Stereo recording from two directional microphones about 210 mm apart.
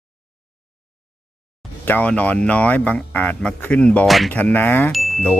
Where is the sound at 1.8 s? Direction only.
10° left (ahead or behind).